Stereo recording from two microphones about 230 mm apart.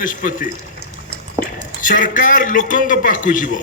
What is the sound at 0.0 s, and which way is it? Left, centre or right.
Speech, left.